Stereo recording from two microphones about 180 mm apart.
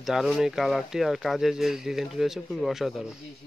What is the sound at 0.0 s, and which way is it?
Speech, centre (ahead or behind).